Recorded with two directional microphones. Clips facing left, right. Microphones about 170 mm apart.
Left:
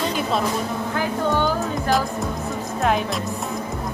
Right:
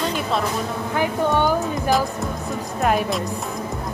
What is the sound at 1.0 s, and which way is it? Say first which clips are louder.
Speech: right 2 dB; 15° right (ahead or behind).